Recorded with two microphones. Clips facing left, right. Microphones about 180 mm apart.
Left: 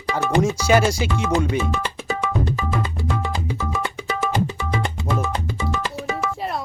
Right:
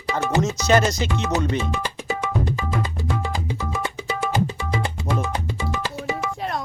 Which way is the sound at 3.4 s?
20° right (ahead or behind).